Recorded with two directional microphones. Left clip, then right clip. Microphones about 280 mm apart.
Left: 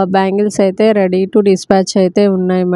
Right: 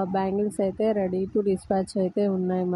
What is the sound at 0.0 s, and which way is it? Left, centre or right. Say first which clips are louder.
Speech: left 13 dB; left.